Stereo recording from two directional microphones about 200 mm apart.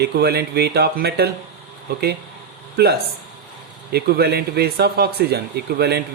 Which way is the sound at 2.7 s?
55° right (ahead or behind).